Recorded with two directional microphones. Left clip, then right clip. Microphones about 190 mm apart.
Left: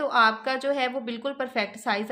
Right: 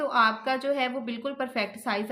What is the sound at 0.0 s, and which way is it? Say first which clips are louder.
A woman's voice: left 2 dB; 30° left (ahead or behind).